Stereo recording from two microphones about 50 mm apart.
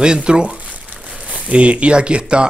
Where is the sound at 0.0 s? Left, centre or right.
Centre.